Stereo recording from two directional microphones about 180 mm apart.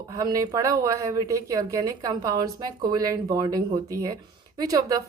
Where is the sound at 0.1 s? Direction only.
20° right (ahead or behind).